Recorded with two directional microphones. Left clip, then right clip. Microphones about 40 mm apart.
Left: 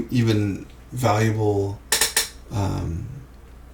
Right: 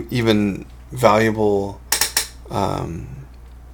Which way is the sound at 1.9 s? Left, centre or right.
Centre.